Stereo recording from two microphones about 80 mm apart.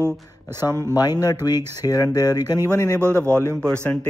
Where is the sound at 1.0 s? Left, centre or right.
Left.